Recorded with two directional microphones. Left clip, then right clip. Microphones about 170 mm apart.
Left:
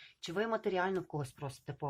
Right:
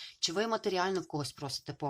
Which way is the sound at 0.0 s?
25° right (ahead or behind).